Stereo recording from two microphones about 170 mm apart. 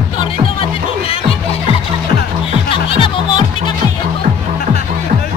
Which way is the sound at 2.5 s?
35° left (ahead or behind).